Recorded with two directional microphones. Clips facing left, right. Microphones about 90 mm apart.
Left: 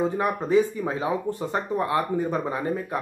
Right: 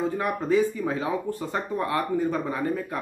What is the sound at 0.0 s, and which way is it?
Speech, 20° left (ahead or behind).